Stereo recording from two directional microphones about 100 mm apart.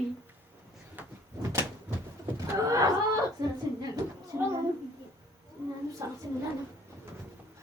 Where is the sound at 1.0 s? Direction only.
15° right (ahead or behind).